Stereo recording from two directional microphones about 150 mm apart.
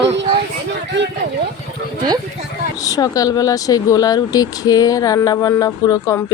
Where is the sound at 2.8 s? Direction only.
25° left (ahead or behind).